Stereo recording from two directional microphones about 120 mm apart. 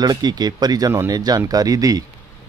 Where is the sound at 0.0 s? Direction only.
35° right (ahead or behind).